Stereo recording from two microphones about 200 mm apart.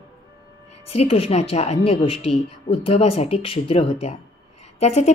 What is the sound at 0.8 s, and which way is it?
A woman's voice, 30° left (ahead or behind).